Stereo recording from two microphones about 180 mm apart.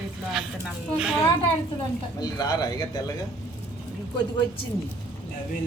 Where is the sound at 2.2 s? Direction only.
20° left (ahead or behind).